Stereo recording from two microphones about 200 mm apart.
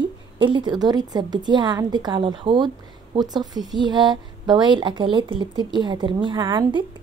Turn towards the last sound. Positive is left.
turn(degrees=-25)  # may be behind; listen again after turning